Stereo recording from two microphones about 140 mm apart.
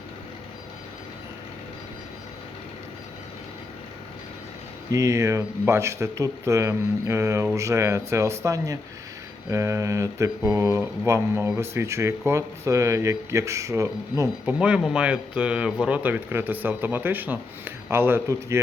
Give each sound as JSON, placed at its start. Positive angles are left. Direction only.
{"t": 4.9, "sound": "speech", "side_deg": -25}
{"t": 14.6, "sound": "speech", "side_deg": -5}